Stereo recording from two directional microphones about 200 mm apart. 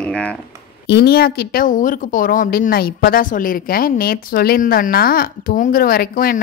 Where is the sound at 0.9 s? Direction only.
55° left (ahead or behind).